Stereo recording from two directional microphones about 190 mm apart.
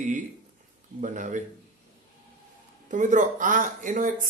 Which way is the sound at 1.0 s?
40° right (ahead or behind).